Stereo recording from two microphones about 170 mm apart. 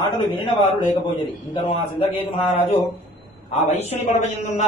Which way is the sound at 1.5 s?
35° left (ahead or behind).